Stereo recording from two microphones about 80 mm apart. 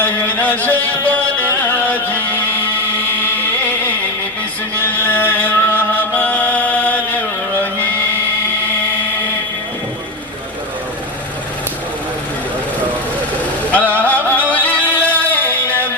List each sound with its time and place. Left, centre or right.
0.3 s music: left
4.8 s chant: left
13.7 s music: centre